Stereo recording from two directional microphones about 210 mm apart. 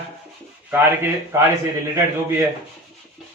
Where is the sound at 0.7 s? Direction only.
10° right (ahead or behind).